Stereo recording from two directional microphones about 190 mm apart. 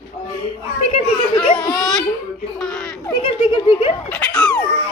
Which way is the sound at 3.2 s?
25° left (ahead or behind).